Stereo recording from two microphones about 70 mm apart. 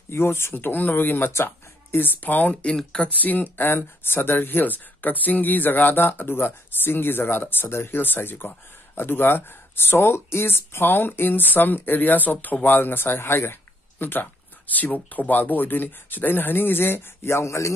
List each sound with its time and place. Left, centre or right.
0.1 s speech: left
2.6 s speech: centre
3.3 s speech: left